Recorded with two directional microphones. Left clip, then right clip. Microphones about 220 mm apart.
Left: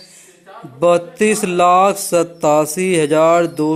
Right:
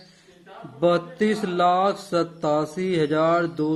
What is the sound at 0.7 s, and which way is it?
Mantra, 30° left (ahead or behind).